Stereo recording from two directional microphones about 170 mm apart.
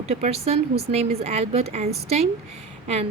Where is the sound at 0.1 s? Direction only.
40° right (ahead or behind).